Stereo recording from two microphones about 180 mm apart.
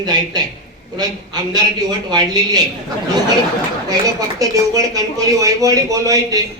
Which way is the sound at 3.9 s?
20° right (ahead or behind).